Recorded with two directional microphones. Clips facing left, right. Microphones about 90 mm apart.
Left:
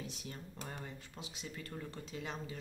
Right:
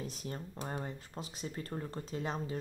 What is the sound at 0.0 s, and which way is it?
Speech, 40° right (ahead or behind).